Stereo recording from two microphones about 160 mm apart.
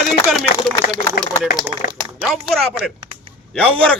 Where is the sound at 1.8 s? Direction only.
60° left (ahead or behind).